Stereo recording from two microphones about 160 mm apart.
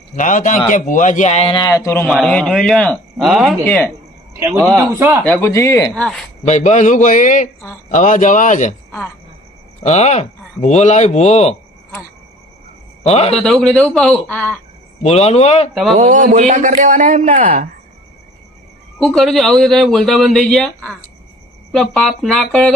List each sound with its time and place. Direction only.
0.2 s speech: 50° left (ahead or behind)
1.6 s speech: 20° left (ahead or behind); by 3.5 s centre (ahead or behind)
4.4 s speech: 10° right (ahead or behind)
5.2 s speech: 10° left (ahead or behind)
5.9 s speech: 5° left (ahead or behind)
6.4 s speech: 45° left (ahead or behind)
9.8 s speech: 45° left (ahead or behind)
13.0 s a man's voice: 40° left (ahead or behind)
13.3 s speech: 5° left (ahead or behind)
15.0 s speech: 40° left (ahead or behind)
15.7 s speech: centre (ahead or behind)
16.0 s a man's voice: 50° right (ahead or behind)
18.9 s speech: centre (ahead or behind)